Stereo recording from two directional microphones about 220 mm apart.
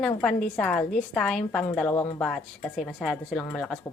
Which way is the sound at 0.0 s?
5° left (ahead or behind).